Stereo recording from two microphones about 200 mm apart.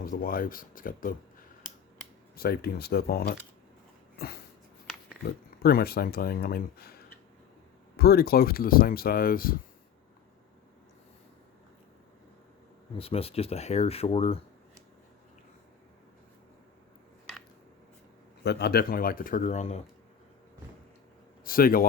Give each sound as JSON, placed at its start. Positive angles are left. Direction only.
{"t": 0.0, "sound": "speech", "side_deg": 45}
{"t": 2.3, "sound": "speech", "side_deg": 50}
{"t": 5.2, "sound": "speech", "side_deg": 50}
{"t": 13.0, "sound": "speech", "side_deg": 30}
{"t": 18.4, "sound": "speech", "side_deg": 50}
{"t": 21.4, "sound": "speech", "side_deg": 45}